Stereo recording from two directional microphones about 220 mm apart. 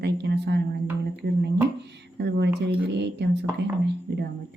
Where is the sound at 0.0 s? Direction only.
50° right (ahead or behind).